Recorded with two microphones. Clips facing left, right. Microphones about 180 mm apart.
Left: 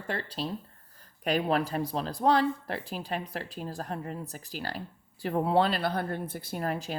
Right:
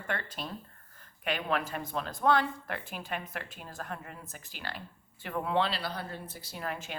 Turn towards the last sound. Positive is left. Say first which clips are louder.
# left 6 dB
turn(degrees=40)  # may be behind; listen again after turning